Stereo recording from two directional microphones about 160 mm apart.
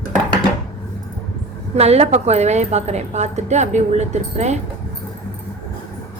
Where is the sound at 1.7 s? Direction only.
40° right (ahead or behind).